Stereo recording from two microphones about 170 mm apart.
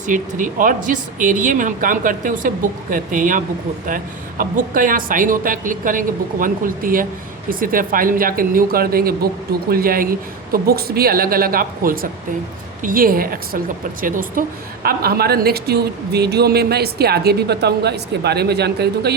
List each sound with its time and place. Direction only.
0.0 s speech: 50° right (ahead or behind)
14.8 s speech: 65° right (ahead or behind)